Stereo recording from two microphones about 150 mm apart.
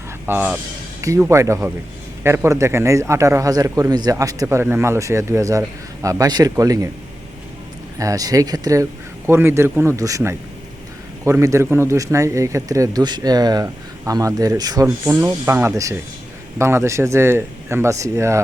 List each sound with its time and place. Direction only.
0.3 s speech: 15° right (ahead or behind)
7.9 s speech: 25° right (ahead or behind)